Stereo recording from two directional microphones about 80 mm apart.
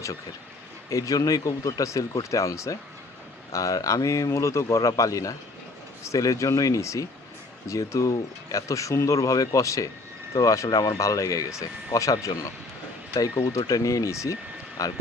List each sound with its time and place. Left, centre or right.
0.9 s speech: left